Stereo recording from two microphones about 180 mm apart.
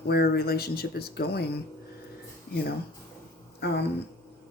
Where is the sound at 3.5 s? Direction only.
70° left (ahead or behind).